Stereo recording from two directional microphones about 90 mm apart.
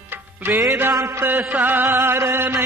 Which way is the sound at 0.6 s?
30° right (ahead or behind).